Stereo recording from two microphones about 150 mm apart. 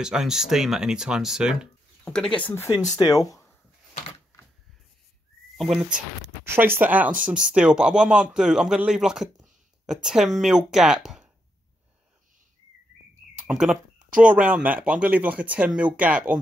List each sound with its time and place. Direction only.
0.0 s speech: 5° right (ahead or behind)
2.8 s speech: 25° left (ahead or behind)
5.6 s speech: centre (ahead or behind)
6.4 s speech: 15° right (ahead or behind)
13.5 s speech: centre (ahead or behind)